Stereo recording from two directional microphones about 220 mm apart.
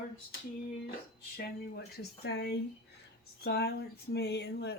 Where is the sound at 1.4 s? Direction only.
45° left (ahead or behind).